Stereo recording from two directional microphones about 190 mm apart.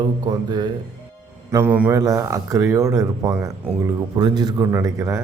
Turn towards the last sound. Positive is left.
turn(degrees=-15)  # may be behind; listen again after turning